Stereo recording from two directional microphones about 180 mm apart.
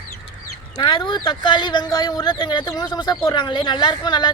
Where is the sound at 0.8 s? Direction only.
25° left (ahead or behind).